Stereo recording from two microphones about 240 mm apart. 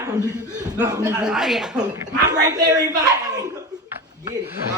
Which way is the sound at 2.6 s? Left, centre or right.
Centre.